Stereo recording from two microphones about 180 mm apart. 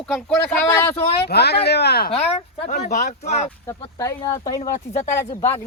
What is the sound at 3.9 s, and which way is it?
Speech, 15° left (ahead or behind).